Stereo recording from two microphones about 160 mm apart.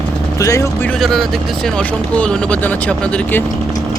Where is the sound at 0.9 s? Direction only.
Centre (ahead or behind).